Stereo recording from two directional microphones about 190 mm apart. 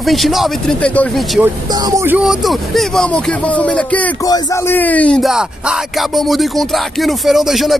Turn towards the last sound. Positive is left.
turn(degrees=0)  # may be behind; listen again after turning